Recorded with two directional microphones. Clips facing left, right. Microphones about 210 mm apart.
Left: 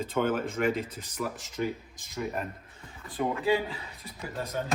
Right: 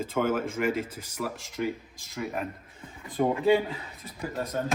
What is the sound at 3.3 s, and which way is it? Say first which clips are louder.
Speech: right 4 dB; 25° right (ahead or behind).